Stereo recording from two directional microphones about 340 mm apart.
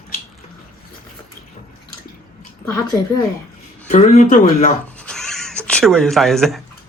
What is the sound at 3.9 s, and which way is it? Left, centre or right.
Speech, left.